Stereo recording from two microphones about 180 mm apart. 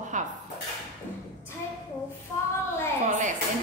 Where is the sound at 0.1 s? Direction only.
45° right (ahead or behind).